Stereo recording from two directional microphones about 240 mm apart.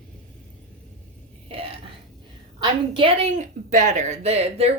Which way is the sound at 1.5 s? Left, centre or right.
Right.